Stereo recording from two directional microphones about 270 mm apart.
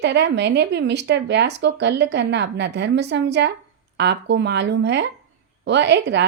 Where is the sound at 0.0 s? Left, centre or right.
Right.